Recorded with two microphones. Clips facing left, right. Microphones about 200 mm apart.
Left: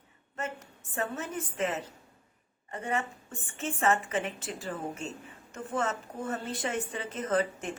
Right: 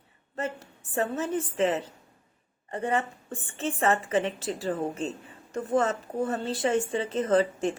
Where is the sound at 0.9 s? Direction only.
35° right (ahead or behind).